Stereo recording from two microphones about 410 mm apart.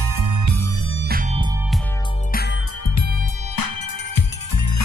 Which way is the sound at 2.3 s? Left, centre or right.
Left.